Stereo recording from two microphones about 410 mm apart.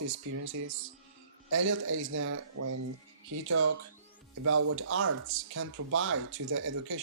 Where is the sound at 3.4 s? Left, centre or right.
Right.